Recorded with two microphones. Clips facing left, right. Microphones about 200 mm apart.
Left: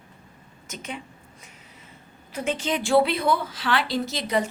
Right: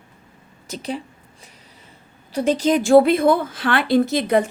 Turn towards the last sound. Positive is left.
turn(degrees=-55)  # may be behind; listen again after turning